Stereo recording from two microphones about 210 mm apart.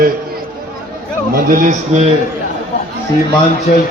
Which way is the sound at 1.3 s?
40° right (ahead or behind).